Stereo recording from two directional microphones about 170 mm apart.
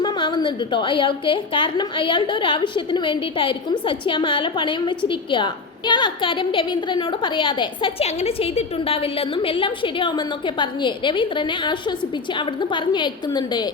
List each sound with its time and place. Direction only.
0.0 s a woman's voice: 25° left (ahead or behind)